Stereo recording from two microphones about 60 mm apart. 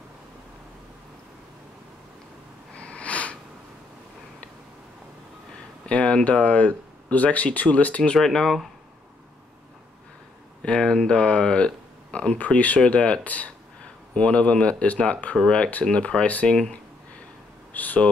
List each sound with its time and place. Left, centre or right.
2.7 s a sound: left
5.9 s speech: left
8.2 s speech: centre
10.6 s speech: centre
17.7 s speech: left